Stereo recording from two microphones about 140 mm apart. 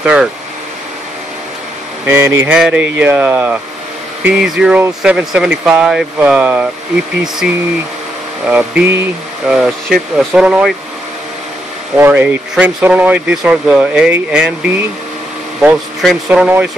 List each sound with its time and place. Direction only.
0.0 s speech: 5° right (ahead or behind)
2.0 s speech: 20° right (ahead or behind)
9.5 s speech: 5° right (ahead or behind)
12.0 s speech: 10° right (ahead or behind)